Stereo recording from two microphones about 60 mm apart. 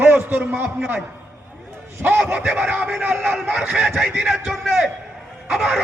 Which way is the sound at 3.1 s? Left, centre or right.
Right.